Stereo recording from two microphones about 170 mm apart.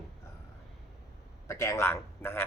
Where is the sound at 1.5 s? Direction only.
15° left (ahead or behind).